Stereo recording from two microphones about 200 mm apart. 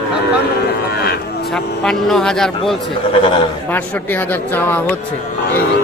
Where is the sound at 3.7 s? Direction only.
10° left (ahead or behind).